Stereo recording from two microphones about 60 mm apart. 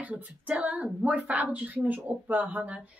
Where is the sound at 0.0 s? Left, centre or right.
Right.